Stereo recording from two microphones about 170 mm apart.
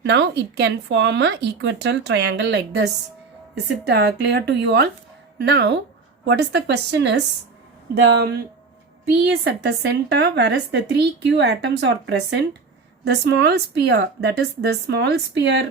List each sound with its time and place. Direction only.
0.0 s a woman's voice: 85° right
3.8 s a woman's voice: 75° right (ahead or behind); by 7.2 s 90° right
8.0 s a woman's voice: 75° right (ahead or behind)